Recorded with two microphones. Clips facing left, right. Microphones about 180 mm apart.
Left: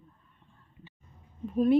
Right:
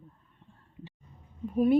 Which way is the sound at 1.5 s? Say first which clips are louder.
Even; 5° right (ahead or behind).